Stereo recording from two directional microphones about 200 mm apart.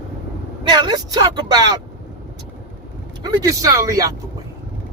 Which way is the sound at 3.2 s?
15° right (ahead or behind).